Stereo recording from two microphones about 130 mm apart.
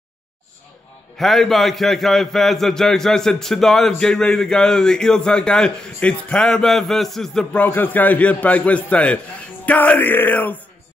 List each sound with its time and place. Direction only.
1.1 s a man's voice: centre (ahead or behind)
9.7 s music: 10° left (ahead or behind)